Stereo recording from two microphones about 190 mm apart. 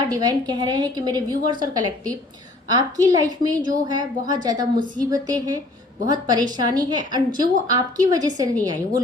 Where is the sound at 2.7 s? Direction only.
20° right (ahead or behind).